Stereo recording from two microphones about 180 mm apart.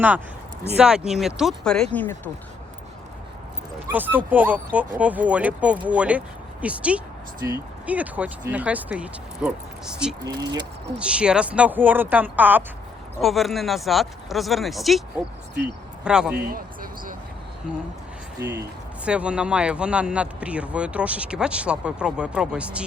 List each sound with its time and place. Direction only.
0.8 s speech: 5° right (ahead or behind)
3.9 s speech: 10° right (ahead or behind)
10.2 s speech: 20° right (ahead or behind)
10.9 s speech: 5° right (ahead or behind)
16.0 s speech: 5° right (ahead or behind)
16.3 s a sound: 55° right (ahead or behind)
18.3 s speech: 10° right (ahead or behind)